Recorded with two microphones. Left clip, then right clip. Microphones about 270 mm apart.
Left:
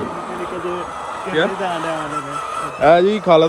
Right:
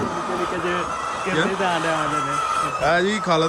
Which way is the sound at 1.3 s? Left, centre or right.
Centre.